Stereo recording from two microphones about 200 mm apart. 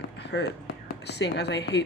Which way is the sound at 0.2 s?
60° left (ahead or behind).